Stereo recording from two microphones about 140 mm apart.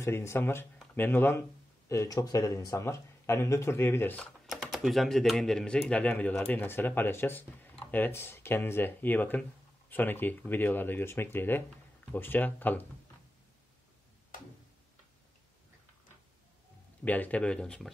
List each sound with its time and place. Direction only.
0.0 s speech: 20° left (ahead or behind)
4.5 s speech: 5° right (ahead or behind); by 12.8 s 15° left (ahead or behind)
17.0 s speech: 10° left (ahead or behind)